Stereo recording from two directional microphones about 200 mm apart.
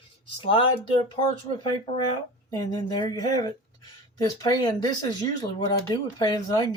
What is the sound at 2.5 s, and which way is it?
Speech, 20° left (ahead or behind).